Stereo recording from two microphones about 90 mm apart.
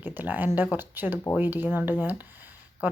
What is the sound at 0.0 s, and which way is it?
Speech, 20° right (ahead or behind).